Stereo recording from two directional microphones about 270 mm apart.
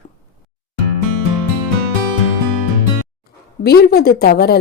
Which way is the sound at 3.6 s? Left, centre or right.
Left.